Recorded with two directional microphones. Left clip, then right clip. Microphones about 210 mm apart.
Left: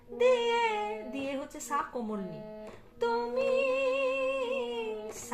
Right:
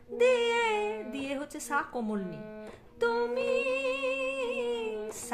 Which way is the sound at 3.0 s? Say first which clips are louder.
Right 1 dB; 50° right (ahead or behind).